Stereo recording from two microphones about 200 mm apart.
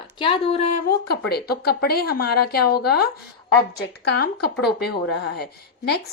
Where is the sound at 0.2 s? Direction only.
25° left (ahead or behind).